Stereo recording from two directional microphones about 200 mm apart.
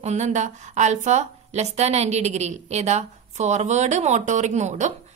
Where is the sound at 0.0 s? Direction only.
35° right (ahead or behind).